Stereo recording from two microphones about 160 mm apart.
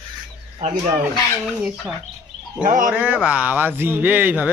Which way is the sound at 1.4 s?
5° right (ahead or behind).